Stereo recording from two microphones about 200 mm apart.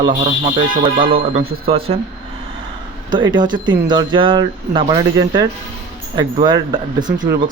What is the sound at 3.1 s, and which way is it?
Speech, 25° right (ahead or behind).